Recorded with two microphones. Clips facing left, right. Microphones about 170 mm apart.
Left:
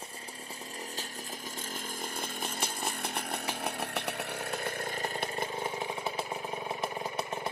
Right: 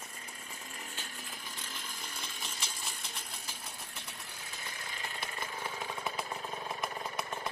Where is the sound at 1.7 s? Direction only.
50° left (ahead or behind).